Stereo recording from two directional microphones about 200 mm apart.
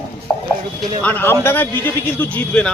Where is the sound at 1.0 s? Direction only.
10° left (ahead or behind).